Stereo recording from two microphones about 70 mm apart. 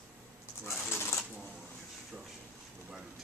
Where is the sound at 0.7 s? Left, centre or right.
Left.